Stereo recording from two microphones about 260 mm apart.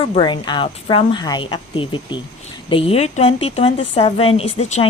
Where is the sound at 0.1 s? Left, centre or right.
Centre.